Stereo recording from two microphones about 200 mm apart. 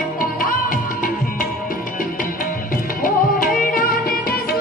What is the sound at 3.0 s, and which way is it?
Music, 45° left (ahead or behind).